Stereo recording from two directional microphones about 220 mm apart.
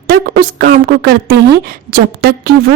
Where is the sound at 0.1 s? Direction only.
40° right (ahead or behind).